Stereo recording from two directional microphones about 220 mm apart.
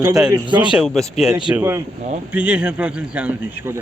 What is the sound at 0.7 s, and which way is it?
Speech, centre (ahead or behind).